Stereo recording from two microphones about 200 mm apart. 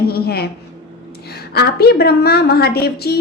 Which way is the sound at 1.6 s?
55° left (ahead or behind).